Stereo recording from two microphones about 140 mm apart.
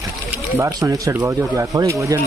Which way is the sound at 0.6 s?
20° right (ahead or behind).